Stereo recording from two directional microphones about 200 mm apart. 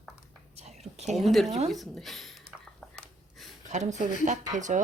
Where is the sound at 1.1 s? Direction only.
Centre (ahead or behind).